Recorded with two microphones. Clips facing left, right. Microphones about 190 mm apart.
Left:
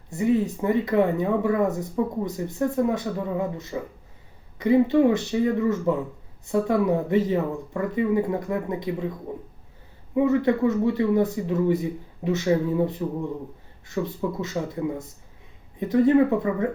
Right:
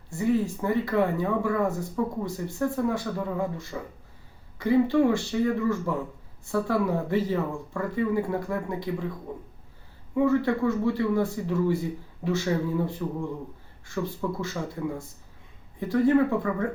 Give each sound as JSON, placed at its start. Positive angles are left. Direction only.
{"t": 0.1, "sound": "speech", "side_deg": 20}
{"t": 10.2, "sound": "speech", "side_deg": 20}